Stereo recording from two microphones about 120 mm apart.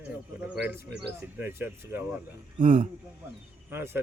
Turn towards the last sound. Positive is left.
turn(degrees=-20)  # may be behind; listen again after turning